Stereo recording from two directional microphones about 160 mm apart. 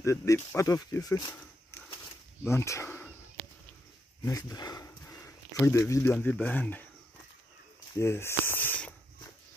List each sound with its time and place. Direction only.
0.0 s speech: 20° left (ahead or behind)
2.4 s speech: 15° left (ahead or behind)
4.2 s dog: 20° left (ahead or behind)
6.1 s speech: 10° left (ahead or behind)
8.0 s speech: 15° left (ahead or behind)